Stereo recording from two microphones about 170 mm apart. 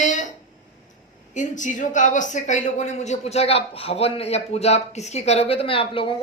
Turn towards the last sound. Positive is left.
turn(degrees=30)  # may be behind; listen again after turning